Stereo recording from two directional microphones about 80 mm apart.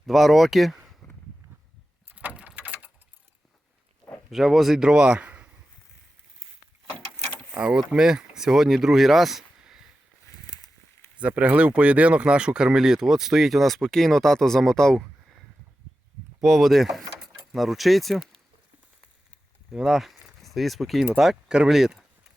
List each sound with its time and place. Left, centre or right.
0.0 s speech: centre
2.1 s vehicle: centre
2.6 s a sound: right
4.3 s a man's voice: centre
7.5 s speech: centre
10.3 s a sound: left
11.2 s speech: centre
16.4 s speech: centre
19.7 s speech: centre